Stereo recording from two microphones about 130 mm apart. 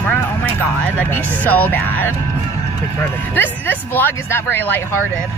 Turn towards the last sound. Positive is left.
turn(degrees=15)  # may be behind; listen again after turning